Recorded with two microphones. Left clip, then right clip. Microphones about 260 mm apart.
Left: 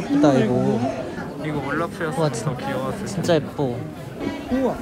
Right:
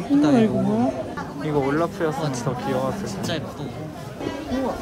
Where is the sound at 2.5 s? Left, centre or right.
Right.